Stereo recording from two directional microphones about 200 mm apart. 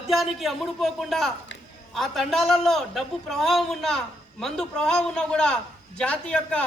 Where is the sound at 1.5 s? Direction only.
65° left (ahead or behind).